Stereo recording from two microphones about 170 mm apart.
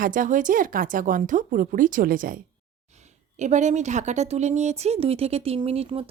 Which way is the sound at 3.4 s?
45° right (ahead or behind).